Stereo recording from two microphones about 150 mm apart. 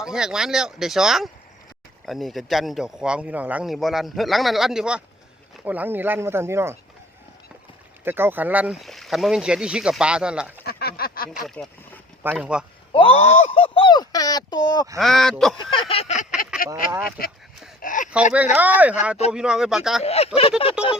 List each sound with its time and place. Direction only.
0.0 s speech: 5° right (ahead or behind)
8.0 s speech: 15° right (ahead or behind)
10.7 s a sound: 90° left
11.4 s speech: centre (ahead or behind)
12.9 s speech: 35° left (ahead or behind)
14.9 s speech: centre (ahead or behind)
15.7 s a sound: 35° left (ahead or behind)
17.8 s a sound: 60° left (ahead or behind)
18.1 s speech: 10° right (ahead or behind)
20.0 s speech: 45° left (ahead or behind)
20.8 s speech: 5° right (ahead or behind)